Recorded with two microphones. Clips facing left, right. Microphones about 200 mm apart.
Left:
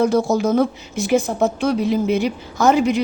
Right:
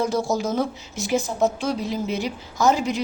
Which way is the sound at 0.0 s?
60° left (ahead or behind).